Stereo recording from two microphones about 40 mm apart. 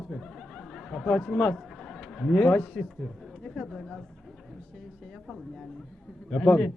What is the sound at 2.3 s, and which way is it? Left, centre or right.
Speech, left.